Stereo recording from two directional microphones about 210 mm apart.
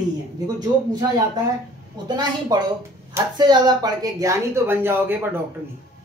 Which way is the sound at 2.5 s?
20° right (ahead or behind).